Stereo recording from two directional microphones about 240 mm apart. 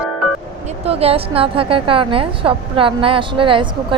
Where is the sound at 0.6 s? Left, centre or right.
Right.